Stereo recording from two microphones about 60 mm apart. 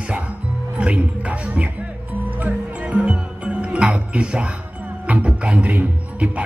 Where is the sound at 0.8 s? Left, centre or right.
Right.